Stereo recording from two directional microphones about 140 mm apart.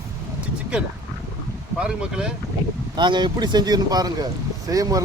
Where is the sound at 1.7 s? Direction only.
5° right (ahead or behind).